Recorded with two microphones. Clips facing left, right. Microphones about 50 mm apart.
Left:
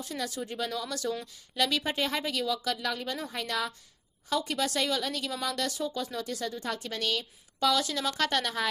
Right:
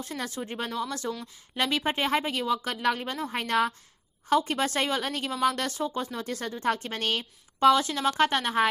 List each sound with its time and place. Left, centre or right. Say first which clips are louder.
0.0 s speech: right 1 dB; right